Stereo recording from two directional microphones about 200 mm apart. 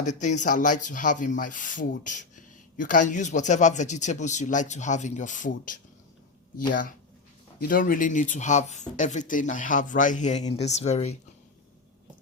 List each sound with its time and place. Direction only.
0.0 s speech: 35° left (ahead or behind)
7.6 s speech: 45° left (ahead or behind)